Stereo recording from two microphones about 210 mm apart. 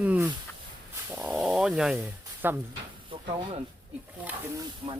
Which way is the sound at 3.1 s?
25° right (ahead or behind).